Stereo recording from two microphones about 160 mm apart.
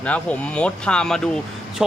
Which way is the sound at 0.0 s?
10° left (ahead or behind).